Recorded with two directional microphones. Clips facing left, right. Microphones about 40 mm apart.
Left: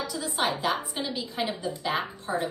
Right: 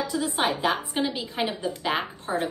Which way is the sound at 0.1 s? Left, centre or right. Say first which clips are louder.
Right 2 dB; right.